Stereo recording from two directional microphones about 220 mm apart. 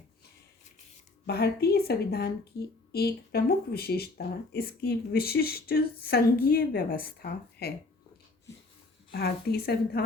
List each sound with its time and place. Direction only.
1.3 s speech: 45° left (ahead or behind)
9.1 s speech: 45° left (ahead or behind)